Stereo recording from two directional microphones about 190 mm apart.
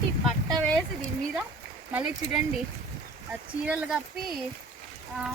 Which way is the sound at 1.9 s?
5° right (ahead or behind).